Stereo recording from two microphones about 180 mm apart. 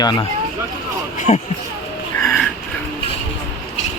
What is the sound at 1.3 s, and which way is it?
Speech, 40° left (ahead or behind).